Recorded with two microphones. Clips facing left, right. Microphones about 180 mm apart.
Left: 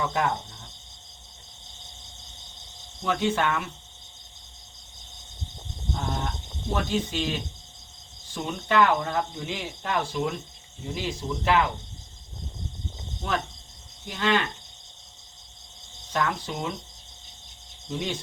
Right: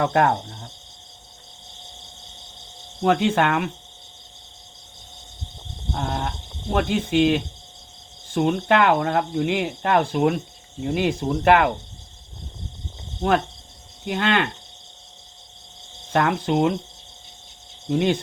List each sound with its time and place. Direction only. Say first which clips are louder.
0.0 s speech: right 7 dB; 60° right (ahead or behind)
3.0 s speech: right 6 dB; 60° right (ahead or behind)
5.9 s cattle: right 4 dB; 60° right (ahead or behind)
6.7 s speech: right 8 dB; 60° right (ahead or behind)
13.2 s speech: right 9 dB; 60° right (ahead or behind)
16.0 s speech: right 7 dB; 60° right (ahead or behind)
17.8 s speech: right 10 dB; 60° right (ahead or behind)